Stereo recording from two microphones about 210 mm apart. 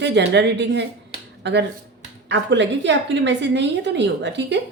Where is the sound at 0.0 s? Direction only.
55° right (ahead or behind).